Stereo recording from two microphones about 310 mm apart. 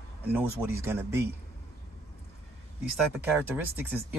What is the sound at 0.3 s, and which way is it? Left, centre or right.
Speech, centre.